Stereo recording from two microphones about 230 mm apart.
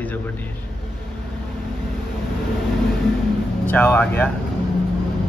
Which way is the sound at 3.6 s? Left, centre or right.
Centre.